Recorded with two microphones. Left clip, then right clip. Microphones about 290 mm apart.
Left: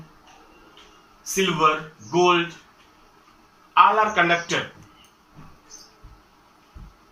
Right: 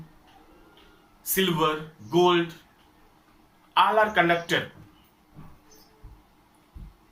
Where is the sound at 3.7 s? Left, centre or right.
Right.